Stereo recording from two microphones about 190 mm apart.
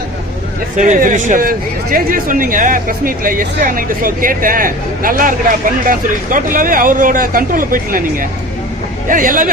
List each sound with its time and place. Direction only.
0.8 s speech: 45° right (ahead or behind)
9.0 s speech: 45° right (ahead or behind)